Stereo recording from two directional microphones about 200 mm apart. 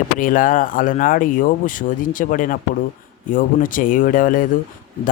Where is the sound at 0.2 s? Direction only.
40° left (ahead or behind).